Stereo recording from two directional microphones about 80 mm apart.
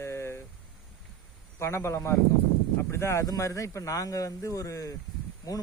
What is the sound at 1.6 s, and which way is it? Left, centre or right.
Speech, left.